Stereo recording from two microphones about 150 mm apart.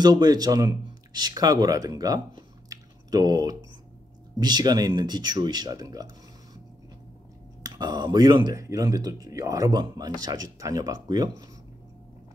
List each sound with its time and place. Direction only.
0.0 s speech: 25° right (ahead or behind)
7.6 s speech: 25° right (ahead or behind)